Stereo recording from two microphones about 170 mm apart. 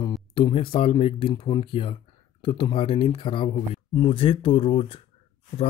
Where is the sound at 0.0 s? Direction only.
25° left (ahead or behind).